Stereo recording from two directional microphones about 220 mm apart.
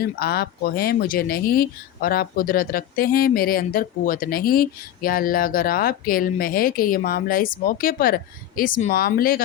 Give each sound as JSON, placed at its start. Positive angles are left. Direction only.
{"t": 0.0, "sound": "speech", "side_deg": 45}